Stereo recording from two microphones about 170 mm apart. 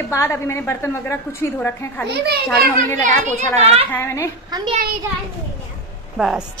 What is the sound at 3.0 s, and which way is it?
Speech, 45° right (ahead or behind).